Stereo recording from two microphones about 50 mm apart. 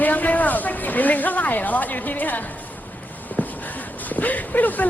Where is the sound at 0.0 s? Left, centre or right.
Left.